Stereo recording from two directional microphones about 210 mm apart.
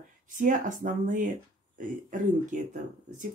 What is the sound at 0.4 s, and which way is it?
Speech, 40° right (ahead or behind).